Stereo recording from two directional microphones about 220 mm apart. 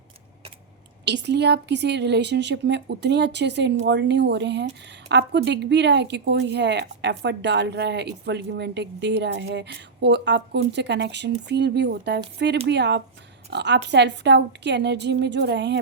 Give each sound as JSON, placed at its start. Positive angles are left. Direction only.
{"t": 1.0, "sound": "speech", "side_deg": -50}